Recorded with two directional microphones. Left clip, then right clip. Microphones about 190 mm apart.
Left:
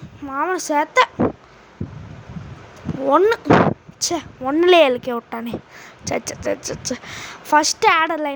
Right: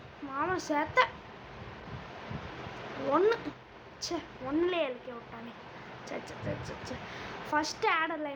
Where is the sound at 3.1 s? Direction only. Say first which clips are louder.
Left 14 dB; 50° left (ahead or behind).